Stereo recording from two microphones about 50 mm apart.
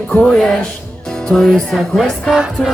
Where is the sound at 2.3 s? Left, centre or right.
Centre.